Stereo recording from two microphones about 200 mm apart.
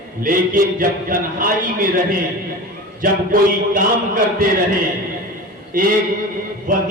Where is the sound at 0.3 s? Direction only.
45° right (ahead or behind).